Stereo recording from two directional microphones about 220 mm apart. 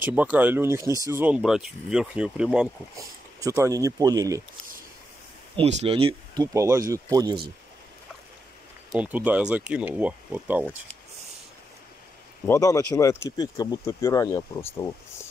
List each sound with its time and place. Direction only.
0.0 s speech: 5° right (ahead or behind)
5.6 s speech: 30° right (ahead or behind)
8.9 s speech: 5° right (ahead or behind)
10.6 s speech: 5° left (ahead or behind)
12.4 s speech: 15° left (ahead or behind)